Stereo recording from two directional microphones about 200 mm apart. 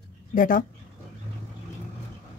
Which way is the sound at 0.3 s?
40° left (ahead or behind).